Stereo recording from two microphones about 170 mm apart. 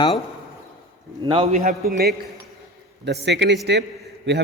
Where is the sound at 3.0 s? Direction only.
90° right.